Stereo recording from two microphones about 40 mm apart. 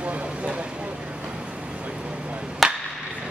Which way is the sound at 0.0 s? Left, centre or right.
Right.